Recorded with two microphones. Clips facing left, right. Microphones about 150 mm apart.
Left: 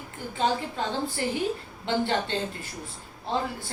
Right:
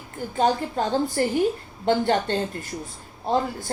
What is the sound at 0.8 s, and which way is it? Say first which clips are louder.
A woman's voice: right 6 dB; 45° right (ahead or behind).